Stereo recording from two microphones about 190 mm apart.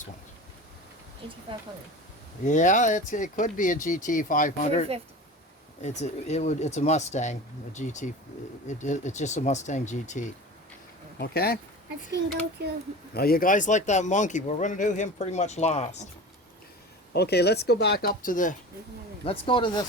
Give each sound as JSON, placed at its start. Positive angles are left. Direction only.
{"t": 2.4, "sound": "speech", "side_deg": 40}
{"t": 11.2, "sound": "speech", "side_deg": 55}
{"t": 13.1, "sound": "speech", "side_deg": 50}
{"t": 17.2, "sound": "speech", "side_deg": 60}
{"t": 19.2, "sound": "speech", "side_deg": 30}